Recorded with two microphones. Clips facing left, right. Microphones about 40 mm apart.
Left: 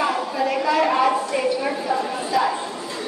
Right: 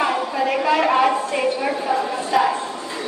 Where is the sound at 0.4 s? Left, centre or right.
Right.